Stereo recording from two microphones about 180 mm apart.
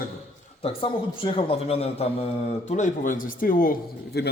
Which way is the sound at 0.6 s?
30° left (ahead or behind).